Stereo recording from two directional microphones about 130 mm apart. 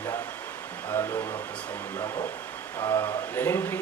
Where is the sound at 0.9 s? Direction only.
20° left (ahead or behind).